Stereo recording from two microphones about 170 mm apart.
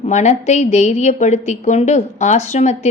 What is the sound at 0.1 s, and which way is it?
Speech, 45° left (ahead or behind).